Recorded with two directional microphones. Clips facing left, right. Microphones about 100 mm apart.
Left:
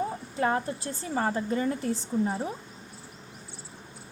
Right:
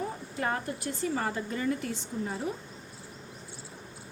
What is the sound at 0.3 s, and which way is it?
A woman's voice, 30° left (ahead or behind).